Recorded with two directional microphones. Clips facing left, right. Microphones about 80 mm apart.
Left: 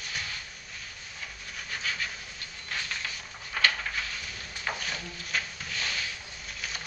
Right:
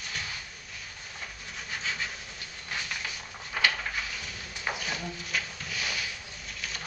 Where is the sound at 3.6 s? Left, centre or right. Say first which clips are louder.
Even; centre.